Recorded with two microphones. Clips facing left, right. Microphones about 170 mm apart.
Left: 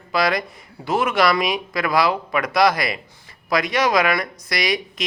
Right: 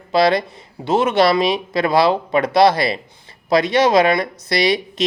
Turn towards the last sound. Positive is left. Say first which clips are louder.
# right 6 dB
turn(degrees=-30)  # may be behind; listen again after turning